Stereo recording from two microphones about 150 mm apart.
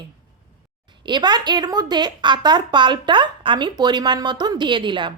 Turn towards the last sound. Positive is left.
turn(degrees=-30)  # may be behind; listen again after turning